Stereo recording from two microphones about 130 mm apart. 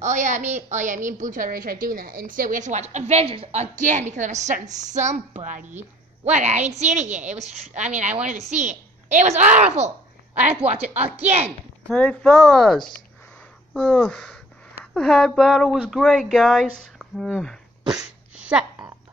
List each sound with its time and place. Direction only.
0.0 s a woman's voice: 70° right (ahead or behind)
11.9 s speech: 10° left (ahead or behind)
18.3 s a sound: 5° right (ahead or behind)